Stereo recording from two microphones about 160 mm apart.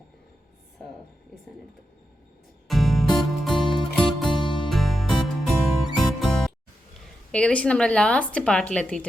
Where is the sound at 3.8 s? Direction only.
35° left (ahead or behind).